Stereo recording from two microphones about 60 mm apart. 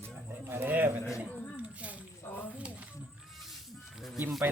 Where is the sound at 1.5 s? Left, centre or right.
Right.